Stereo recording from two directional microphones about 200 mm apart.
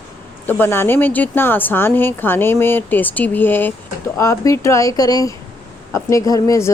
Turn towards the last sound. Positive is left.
turn(degrees=15)  # may be behind; listen again after turning